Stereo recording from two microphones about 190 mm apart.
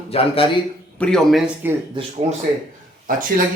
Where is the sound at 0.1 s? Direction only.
30° left (ahead or behind).